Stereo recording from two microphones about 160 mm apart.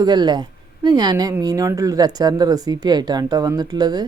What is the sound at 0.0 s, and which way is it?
Speech, 25° right (ahead or behind).